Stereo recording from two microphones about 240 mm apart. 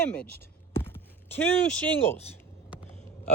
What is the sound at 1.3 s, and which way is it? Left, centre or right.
Speech, centre.